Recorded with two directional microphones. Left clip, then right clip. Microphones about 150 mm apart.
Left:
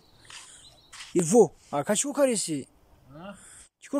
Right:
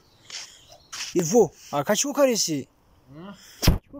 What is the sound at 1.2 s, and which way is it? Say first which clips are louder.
Speech: even; 20° left (ahead or behind).